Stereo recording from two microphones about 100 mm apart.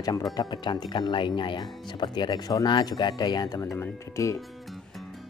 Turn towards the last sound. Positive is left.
turn(degrees=30)  # may be behind; listen again after turning